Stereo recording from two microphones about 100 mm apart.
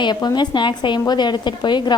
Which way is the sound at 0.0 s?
50° left (ahead or behind).